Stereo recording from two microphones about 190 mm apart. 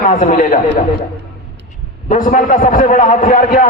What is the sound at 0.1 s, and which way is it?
Speech, 40° left (ahead or behind).